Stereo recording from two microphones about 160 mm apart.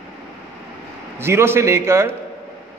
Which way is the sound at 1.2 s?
15° right (ahead or behind).